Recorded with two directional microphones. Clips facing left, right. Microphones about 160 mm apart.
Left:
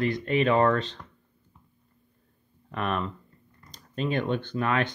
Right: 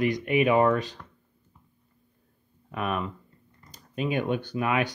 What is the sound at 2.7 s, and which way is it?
Speech, 5° right (ahead or behind).